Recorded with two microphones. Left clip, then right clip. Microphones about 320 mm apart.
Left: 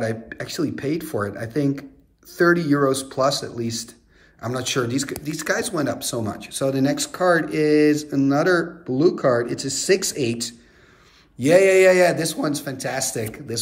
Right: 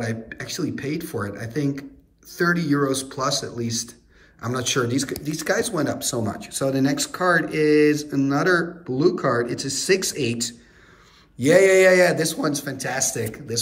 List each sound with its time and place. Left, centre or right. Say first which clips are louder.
0.0 s speech: left 3 dB; centre